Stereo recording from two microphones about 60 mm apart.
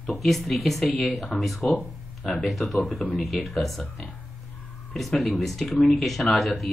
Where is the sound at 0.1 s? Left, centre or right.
Centre.